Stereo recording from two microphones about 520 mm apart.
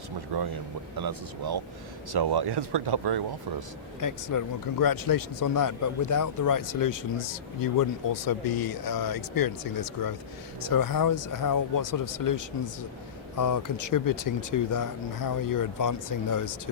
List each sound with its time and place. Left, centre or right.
0.3 s speech: right
4.0 s speech: left